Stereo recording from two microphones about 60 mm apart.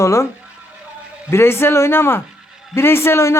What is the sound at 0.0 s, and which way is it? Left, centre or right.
Speech, left.